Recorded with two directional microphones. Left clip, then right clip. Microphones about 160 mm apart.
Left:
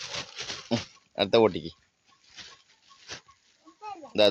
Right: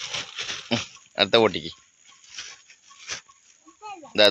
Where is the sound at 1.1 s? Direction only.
5° left (ahead or behind).